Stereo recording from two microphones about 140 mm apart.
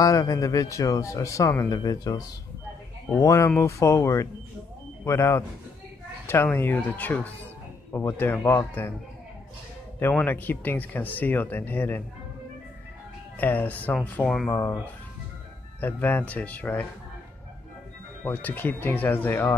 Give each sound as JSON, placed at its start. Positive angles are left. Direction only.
{"t": 0.0, "sound": "speech", "side_deg": 25}
{"t": 9.9, "sound": "speech", "side_deg": 15}
{"t": 13.4, "sound": "speech", "side_deg": 15}
{"t": 14.5, "sound": "speech", "side_deg": 15}
{"t": 15.8, "sound": "speech", "side_deg": 15}
{"t": 18.2, "sound": "speech", "side_deg": 10}